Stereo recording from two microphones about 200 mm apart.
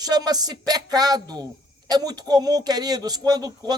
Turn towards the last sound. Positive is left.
turn(degrees=-20)  # may be behind; listen again after turning